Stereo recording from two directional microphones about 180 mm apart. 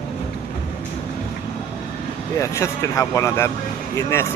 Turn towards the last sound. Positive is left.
turn(degrees=15)  # may be behind; listen again after turning